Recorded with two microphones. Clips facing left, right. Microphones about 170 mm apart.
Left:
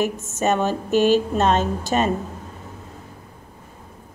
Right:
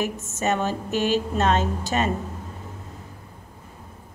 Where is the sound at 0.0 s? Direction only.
20° left (ahead or behind).